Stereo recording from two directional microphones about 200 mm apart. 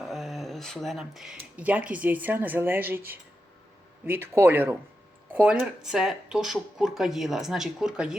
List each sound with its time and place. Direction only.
0.1 s speech: centre (ahead or behind)